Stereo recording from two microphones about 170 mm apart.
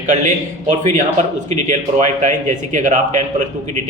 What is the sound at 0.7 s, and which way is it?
A man's voice, 45° right (ahead or behind).